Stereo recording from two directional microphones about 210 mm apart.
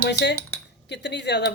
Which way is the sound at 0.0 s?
55° left (ahead or behind).